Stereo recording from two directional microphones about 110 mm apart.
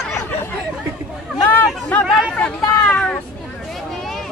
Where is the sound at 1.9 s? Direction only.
15° left (ahead or behind).